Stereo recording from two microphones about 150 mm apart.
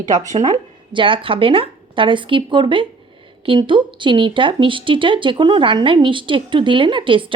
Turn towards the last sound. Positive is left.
turn(degrees=-35)  # may be behind; listen again after turning